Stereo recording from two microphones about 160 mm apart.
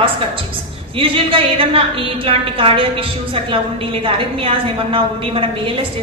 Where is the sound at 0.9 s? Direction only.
35° right (ahead or behind).